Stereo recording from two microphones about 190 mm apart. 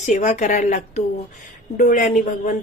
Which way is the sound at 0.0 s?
40° left (ahead or behind).